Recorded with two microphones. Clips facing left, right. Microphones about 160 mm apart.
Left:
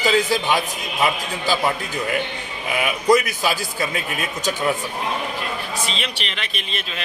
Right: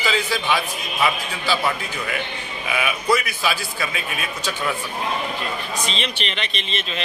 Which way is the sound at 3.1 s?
40° left (ahead or behind).